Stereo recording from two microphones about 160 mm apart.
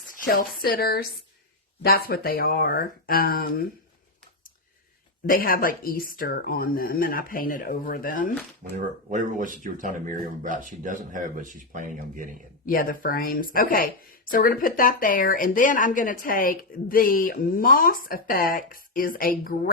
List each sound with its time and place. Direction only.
0.1 s speech: 60° left (ahead or behind)
5.3 s speech: 65° left (ahead or behind)
8.7 s speech: 55° right (ahead or behind)
12.6 s speech: 60° left (ahead or behind)